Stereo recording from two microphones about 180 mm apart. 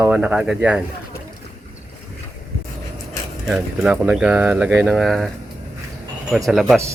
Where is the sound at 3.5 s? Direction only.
5° right (ahead or behind).